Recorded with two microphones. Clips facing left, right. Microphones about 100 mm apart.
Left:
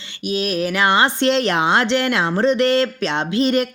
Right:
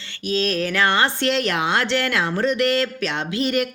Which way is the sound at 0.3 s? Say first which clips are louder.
Left 1 dB; 15° left (ahead or behind).